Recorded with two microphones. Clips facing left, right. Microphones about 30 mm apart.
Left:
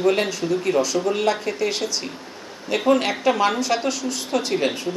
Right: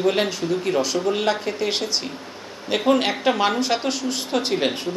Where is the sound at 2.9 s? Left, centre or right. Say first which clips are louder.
Left 1 dB; right.